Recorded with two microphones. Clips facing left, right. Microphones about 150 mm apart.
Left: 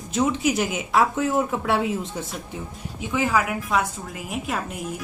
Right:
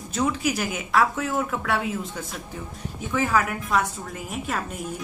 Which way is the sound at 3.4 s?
5° left (ahead or behind).